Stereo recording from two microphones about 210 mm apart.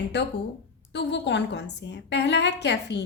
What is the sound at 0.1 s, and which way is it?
A woman's voice, 55° left (ahead or behind).